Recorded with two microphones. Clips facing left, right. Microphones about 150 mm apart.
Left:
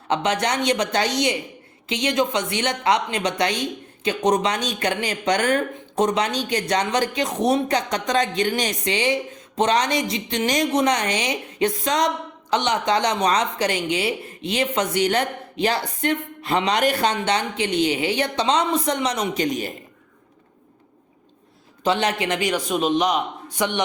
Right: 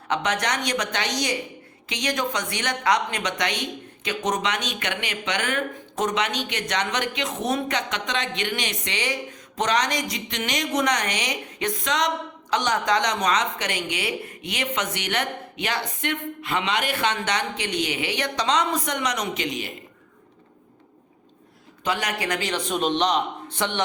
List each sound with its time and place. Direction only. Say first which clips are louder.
0.1 s a woman's voice: left 3 dB; 30° left (ahead or behind)
19.4 s a man's voice: left 6 dB; 45° left (ahead or behind)
21.8 s a man's voice: left 5 dB; 25° left (ahead or behind)